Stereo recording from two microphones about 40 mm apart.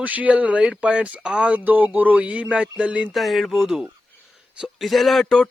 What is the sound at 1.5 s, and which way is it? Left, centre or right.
Speech, right.